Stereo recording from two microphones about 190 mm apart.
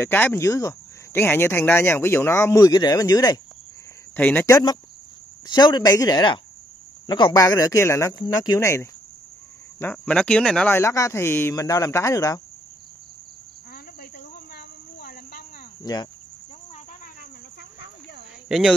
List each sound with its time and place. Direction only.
0.0 s speech: 10° left (ahead or behind)
4.2 s speech: 10° left (ahead or behind)
14.1 s cricket: 55° left (ahead or behind)
15.8 s speech: 20° left (ahead or behind)